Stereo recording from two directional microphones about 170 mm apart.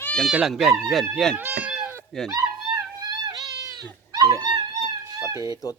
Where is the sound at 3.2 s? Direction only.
25° right (ahead or behind).